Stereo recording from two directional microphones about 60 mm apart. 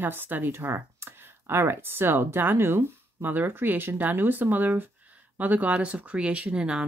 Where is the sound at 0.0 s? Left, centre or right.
Right.